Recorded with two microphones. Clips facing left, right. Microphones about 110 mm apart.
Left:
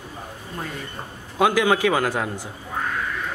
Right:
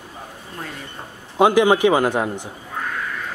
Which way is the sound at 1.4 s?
20° right (ahead or behind).